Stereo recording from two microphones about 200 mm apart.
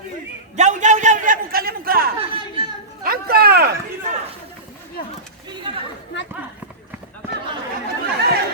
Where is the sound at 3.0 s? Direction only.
50° right (ahead or behind).